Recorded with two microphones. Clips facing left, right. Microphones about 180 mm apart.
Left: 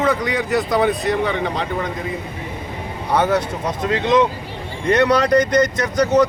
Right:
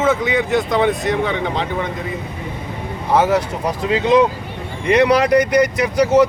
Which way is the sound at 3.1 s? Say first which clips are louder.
Right 2 dB; 5° right (ahead or behind).